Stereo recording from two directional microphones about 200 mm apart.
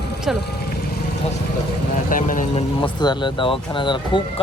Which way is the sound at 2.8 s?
20° left (ahead or behind).